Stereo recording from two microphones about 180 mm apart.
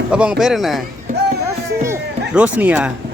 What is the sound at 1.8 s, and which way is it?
Music, 10° right (ahead or behind).